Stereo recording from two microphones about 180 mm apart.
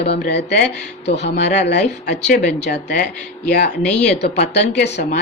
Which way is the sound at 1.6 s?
70° left (ahead or behind).